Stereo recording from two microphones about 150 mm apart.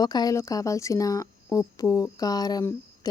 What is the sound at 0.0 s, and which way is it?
Speech, 25° left (ahead or behind).